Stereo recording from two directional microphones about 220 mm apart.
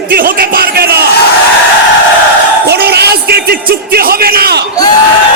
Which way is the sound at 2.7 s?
45° right (ahead or behind).